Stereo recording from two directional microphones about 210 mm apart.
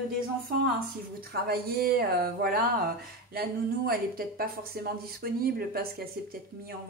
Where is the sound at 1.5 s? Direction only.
45° right (ahead or behind).